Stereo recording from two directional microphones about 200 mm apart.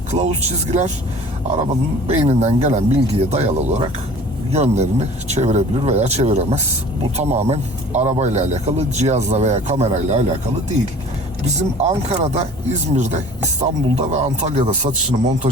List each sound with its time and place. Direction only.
0.1 s speech: 35° right (ahead or behind)
2.0 s speech: 35° right (ahead or behind)
11.8 s speech: 35° right (ahead or behind)